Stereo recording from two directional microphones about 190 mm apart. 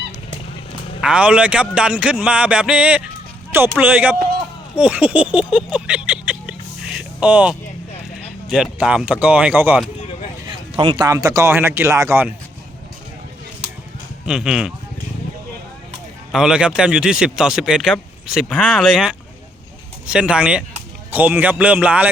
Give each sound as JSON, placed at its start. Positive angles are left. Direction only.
{"t": 1.0, "sound": "speech", "side_deg": -5}
{"t": 4.8, "sound": "a sound", "side_deg": -5}
{"t": 8.4, "sound": "speech", "side_deg": -5}
{"t": 10.8, "sound": "speech", "side_deg": -25}
{"t": 14.3, "sound": "speech", "side_deg": -5}
{"t": 16.3, "sound": "speech", "side_deg": -5}